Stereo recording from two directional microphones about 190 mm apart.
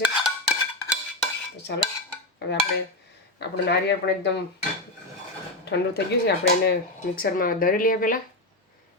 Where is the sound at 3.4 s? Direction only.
60° left (ahead or behind).